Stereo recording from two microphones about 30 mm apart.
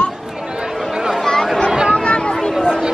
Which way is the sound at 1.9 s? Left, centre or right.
Left.